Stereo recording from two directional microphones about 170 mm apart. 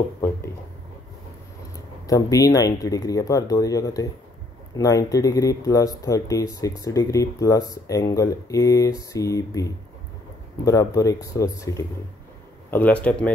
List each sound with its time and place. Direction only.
2.0 s speech: 20° left (ahead or behind)
12.7 s a man's voice: 10° left (ahead or behind)